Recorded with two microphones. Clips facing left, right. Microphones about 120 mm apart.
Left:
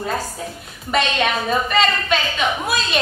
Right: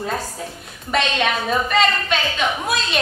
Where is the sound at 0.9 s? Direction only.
Centre (ahead or behind).